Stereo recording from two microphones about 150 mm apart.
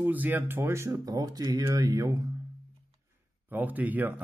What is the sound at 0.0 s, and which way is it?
Speech, 10° right (ahead or behind).